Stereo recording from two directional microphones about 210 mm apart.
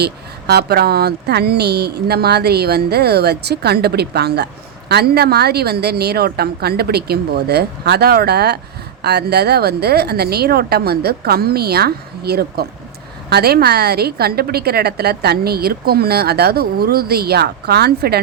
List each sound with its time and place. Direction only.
0.0 s a woman's voice: 50° right (ahead or behind)